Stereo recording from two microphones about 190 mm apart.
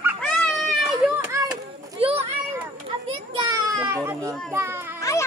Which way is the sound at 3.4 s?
20° right (ahead or behind).